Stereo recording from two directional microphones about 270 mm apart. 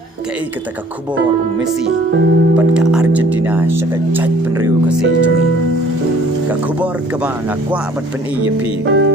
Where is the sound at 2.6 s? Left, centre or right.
Centre.